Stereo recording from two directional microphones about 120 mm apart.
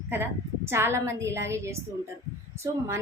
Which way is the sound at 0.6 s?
20° right (ahead or behind).